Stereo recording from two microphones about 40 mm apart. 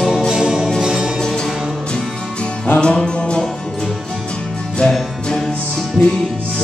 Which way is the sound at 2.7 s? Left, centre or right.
Left.